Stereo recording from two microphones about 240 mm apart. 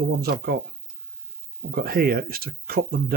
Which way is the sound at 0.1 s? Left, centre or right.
Right.